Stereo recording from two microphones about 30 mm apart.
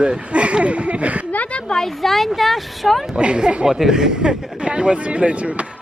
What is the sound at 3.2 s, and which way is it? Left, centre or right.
Speech, right.